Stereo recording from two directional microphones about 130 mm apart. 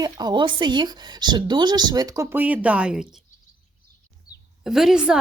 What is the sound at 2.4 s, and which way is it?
Speech, 10° right (ahead or behind).